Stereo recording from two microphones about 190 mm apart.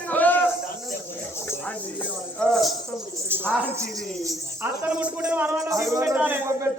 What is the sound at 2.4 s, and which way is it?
Music, centre (ahead or behind).